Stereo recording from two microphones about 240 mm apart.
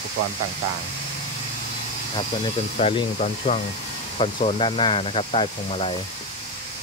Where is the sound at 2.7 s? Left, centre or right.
Left.